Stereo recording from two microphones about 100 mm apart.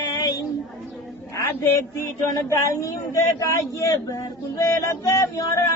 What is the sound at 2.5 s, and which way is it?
Speech, 30° left (ahead or behind).